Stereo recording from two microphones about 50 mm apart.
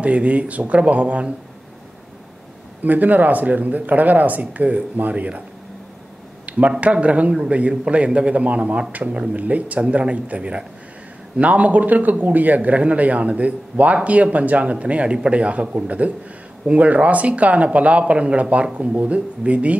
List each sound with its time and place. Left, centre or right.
0.0 s speech: right
2.8 s speech: right
6.5 s a sound: right
6.8 s speech: right